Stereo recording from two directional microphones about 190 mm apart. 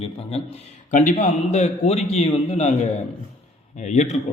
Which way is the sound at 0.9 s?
40° left (ahead or behind).